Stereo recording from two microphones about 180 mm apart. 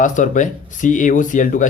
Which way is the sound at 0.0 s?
45° left (ahead or behind).